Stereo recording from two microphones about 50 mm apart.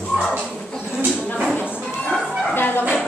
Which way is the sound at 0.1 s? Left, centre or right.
Centre.